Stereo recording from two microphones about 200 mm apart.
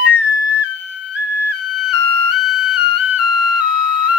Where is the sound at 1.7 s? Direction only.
Centre (ahead or behind).